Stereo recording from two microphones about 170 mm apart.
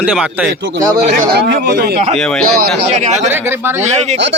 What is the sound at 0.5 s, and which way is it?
Speech, 90° right.